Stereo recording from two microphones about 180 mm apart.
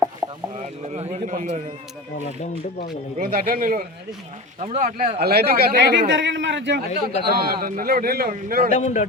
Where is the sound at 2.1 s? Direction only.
40° left (ahead or behind).